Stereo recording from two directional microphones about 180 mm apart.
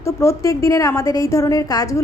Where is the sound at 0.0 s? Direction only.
15° left (ahead or behind).